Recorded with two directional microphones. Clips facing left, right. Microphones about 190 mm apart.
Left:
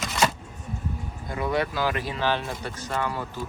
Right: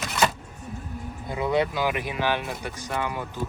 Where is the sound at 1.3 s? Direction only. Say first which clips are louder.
Right 2 dB; 20° right (ahead or behind).